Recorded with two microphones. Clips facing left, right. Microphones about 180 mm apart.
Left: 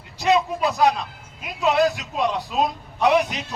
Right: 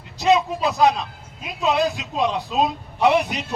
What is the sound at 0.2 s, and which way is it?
Vehicle, 20° right (ahead or behind).